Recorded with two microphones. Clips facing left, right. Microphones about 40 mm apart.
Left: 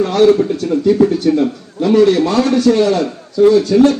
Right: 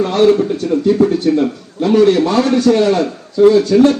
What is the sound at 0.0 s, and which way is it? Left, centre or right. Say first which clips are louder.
A man's voice: left 1 dB; right.